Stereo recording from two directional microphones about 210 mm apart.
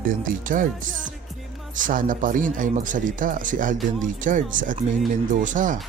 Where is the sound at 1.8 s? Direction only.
40° right (ahead or behind).